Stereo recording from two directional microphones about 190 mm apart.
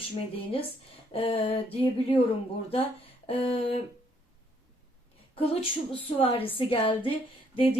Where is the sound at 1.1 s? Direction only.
30° left (ahead or behind).